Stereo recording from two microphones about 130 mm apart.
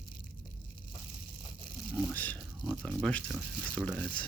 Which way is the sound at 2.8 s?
5° left (ahead or behind).